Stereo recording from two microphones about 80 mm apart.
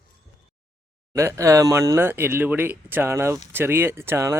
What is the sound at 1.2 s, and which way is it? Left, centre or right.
Speech, right.